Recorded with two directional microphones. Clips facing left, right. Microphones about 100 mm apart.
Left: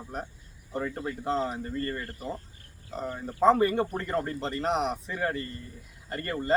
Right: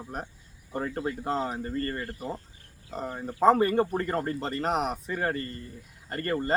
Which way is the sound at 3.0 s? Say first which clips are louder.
Even; 30° right (ahead or behind).